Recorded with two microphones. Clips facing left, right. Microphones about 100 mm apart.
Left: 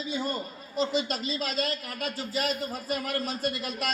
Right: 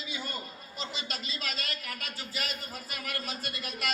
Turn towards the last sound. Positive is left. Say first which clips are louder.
# left 6 dB
turn(degrees=45)  # may be behind; listen again after turning